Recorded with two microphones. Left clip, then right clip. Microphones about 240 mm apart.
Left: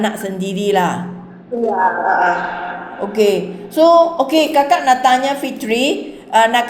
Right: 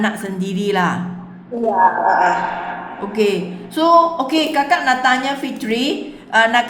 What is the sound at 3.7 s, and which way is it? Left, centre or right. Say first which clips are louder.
A woman's voice: left 2 dB; right.